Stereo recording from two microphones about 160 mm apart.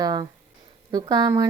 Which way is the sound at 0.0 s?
25° right (ahead or behind).